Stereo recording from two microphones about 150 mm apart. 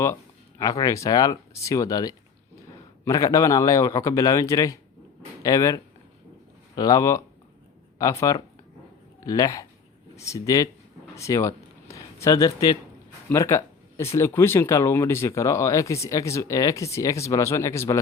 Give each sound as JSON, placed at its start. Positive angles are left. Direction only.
{"t": 0.6, "sound": "speech", "side_deg": 20}
{"t": 11.1, "sound": "a sound", "side_deg": 20}
{"t": 13.2, "sound": "speech", "side_deg": 20}